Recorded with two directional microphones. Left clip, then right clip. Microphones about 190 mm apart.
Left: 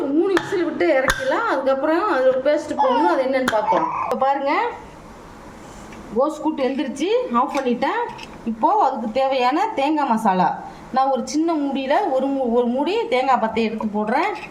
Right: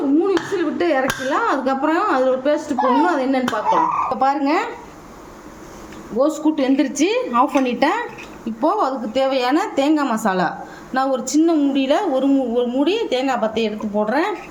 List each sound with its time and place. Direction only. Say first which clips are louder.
0.5 s speech: even; 25° right (ahead or behind)
6.1 s speech: right 2 dB; 15° right (ahead or behind)
8.6 s a woman's voice: left 1 dB; 5° right (ahead or behind)